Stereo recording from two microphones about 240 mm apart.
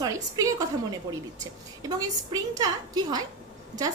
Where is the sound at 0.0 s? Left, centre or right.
Centre.